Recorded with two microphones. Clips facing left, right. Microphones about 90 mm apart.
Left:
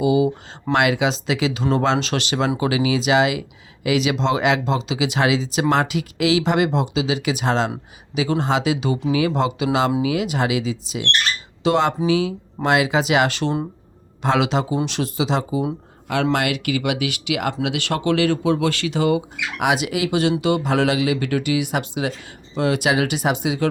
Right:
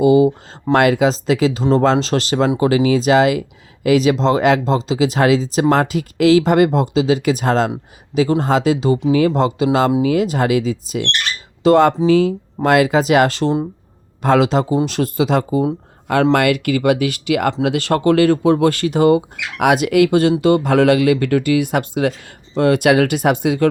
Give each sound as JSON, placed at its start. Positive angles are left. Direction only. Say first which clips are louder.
{"t": 0.0, "sound": "speech", "louder": "right 6 dB", "side_deg": -45}